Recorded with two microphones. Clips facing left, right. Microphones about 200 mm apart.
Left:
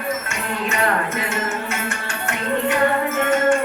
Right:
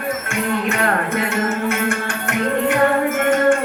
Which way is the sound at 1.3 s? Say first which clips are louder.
Right 5 dB; 55° right (ahead or behind).